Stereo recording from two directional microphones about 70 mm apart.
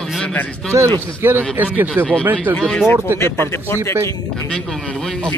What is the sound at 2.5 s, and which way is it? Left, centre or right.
Speech, centre.